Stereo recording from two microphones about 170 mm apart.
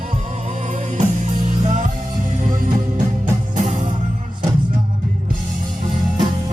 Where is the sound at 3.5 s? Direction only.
45° right (ahead or behind).